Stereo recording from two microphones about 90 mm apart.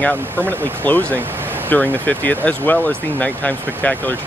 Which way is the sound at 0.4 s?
25° right (ahead or behind).